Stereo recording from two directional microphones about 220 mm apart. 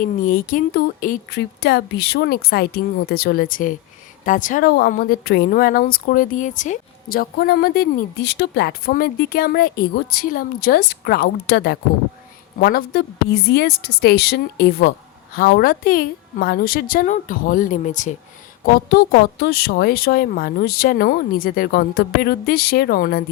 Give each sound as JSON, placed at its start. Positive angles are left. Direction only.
{"t": 0.0, "sound": "a woman's voice", "side_deg": 40}